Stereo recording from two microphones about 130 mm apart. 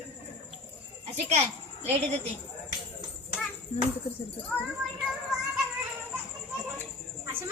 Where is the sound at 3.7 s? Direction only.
60° left (ahead or behind).